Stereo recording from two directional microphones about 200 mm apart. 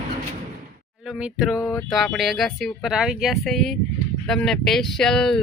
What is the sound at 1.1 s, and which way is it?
Speech, 5° right (ahead or behind).